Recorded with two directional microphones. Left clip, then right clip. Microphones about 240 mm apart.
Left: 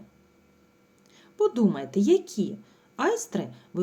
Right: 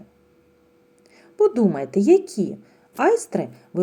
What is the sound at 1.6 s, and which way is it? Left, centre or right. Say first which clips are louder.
Speech: right 5 dB; centre.